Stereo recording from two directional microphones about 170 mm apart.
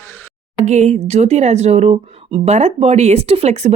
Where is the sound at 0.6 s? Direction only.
45° right (ahead or behind).